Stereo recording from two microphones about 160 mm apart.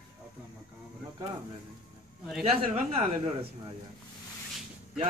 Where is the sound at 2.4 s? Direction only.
45° right (ahead or behind).